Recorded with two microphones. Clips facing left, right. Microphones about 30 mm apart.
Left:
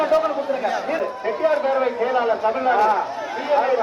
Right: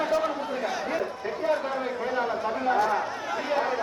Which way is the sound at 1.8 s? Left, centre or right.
Left.